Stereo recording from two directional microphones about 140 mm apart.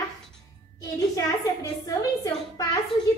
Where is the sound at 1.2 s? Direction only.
25° left (ahead or behind).